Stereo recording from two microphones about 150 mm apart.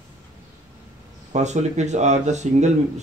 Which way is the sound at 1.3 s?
50° right (ahead or behind).